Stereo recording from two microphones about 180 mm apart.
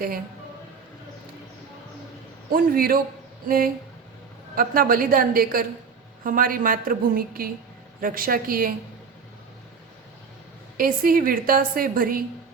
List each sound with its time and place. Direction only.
2.5 s a woman's voice: 55° right (ahead or behind)
10.8 s a woman's voice: 55° right (ahead or behind)